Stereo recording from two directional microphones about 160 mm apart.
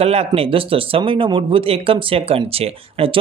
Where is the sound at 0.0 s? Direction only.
40° right (ahead or behind).